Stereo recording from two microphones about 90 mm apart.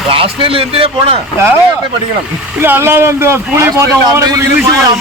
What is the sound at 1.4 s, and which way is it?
A man's voice, 25° right (ahead or behind).